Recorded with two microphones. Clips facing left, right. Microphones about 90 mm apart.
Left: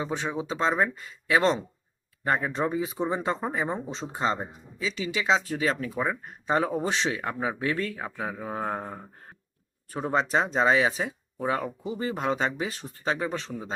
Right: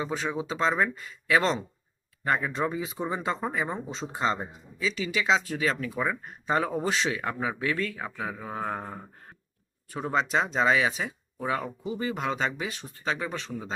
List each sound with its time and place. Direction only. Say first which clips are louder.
0.0 s speech: even; 25° left (ahead or behind)
7.6 s speech: left 1 dB; 30° left (ahead or behind)
8.0 s speech: left 1 dB; 20° left (ahead or behind)
8.4 s mantra: left 3 dB; 15° left (ahead or behind)
10.1 s speech: left 1 dB; 30° left (ahead or behind)
13.5 s mantra: even; 10° left (ahead or behind)